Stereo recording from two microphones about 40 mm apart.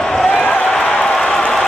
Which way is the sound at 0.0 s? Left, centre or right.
Centre.